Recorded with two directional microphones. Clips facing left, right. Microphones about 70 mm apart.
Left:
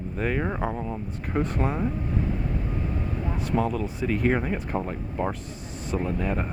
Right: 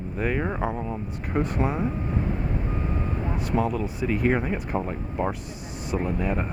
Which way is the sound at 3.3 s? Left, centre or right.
Centre.